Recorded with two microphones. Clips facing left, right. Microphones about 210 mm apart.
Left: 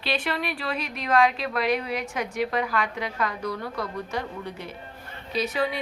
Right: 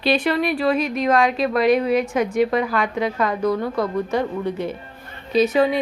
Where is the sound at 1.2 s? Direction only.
20° right (ahead or behind).